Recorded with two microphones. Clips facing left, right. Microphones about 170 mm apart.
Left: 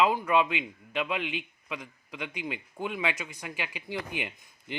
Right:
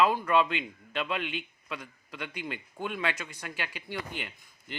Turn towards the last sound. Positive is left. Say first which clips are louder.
# left 4 dB
turn(degrees=15)  # may be behind; listen again after turning